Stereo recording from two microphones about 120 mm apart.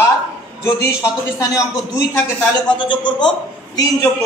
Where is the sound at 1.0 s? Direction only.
25° left (ahead or behind).